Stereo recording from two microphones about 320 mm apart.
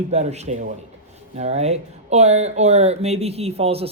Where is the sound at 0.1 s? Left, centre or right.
Centre.